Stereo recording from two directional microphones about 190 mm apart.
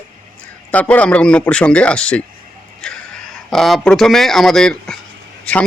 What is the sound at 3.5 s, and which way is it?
A man's voice, centre (ahead or behind).